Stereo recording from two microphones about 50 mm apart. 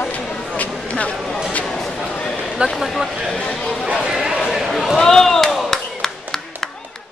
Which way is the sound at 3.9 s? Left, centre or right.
Centre.